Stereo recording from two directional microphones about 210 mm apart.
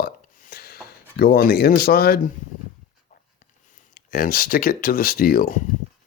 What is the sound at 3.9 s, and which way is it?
Speech, 45° left (ahead or behind).